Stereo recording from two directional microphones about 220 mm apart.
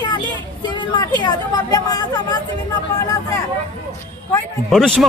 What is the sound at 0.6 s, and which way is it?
Speech, 20° left (ahead or behind).